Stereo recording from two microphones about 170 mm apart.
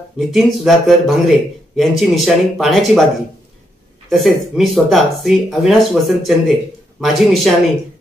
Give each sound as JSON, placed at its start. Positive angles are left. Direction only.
{"t": 0.2, "sound": "speech", "side_deg": 0}
{"t": 4.1, "sound": "speech", "side_deg": 0}